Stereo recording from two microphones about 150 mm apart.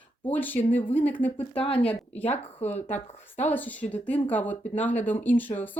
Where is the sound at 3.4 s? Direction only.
10° left (ahead or behind).